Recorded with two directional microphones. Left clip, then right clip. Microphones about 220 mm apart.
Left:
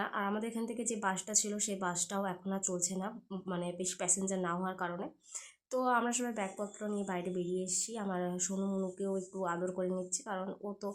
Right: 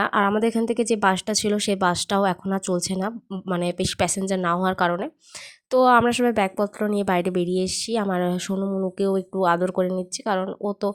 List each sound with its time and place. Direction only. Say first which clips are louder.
0.0 s speech: right 16 dB; 45° right (ahead or behind)